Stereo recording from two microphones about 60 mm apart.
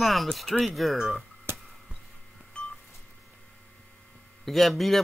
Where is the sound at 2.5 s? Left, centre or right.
Centre.